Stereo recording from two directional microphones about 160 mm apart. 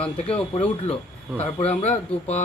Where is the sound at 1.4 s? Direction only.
45° left (ahead or behind).